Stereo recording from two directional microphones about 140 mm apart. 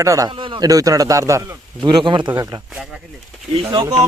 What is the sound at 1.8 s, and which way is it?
Speech, 35° right (ahead or behind).